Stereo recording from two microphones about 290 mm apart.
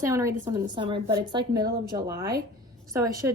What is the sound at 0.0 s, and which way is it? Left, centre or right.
Speech, centre.